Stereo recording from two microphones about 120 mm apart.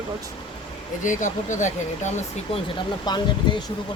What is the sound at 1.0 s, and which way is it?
Speech, 90° left.